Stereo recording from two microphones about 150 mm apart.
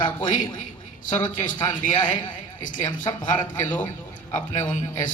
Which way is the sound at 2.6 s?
55° left (ahead or behind).